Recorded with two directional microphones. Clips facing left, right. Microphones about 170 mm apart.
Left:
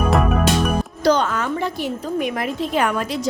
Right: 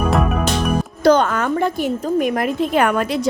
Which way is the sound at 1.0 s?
55° right (ahead or behind).